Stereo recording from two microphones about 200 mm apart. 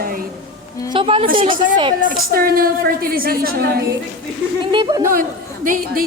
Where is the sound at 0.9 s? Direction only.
25° right (ahead or behind).